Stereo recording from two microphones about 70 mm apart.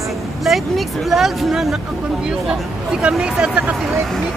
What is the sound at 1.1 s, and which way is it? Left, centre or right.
Speech, centre.